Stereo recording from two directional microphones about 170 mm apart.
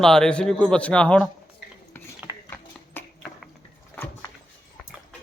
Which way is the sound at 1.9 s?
10° left (ahead or behind).